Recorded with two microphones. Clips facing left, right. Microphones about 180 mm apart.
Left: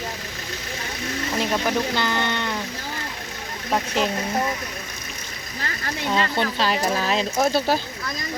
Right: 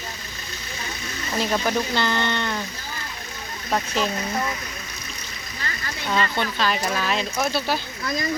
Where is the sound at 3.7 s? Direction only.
15° left (ahead or behind).